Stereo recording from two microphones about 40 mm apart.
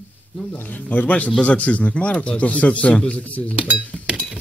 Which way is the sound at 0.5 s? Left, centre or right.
Left.